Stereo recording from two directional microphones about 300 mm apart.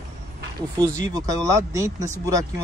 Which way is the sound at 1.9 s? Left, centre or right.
Right.